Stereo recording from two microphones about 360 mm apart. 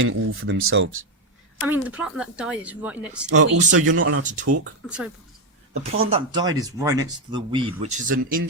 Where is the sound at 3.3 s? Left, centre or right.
Right.